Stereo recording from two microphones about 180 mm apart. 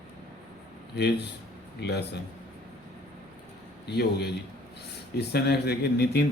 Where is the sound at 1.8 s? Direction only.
70° left (ahead or behind).